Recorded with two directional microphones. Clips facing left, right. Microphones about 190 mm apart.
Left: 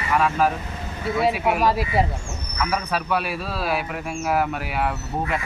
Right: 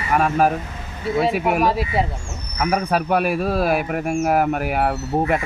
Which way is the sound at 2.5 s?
50° right (ahead or behind).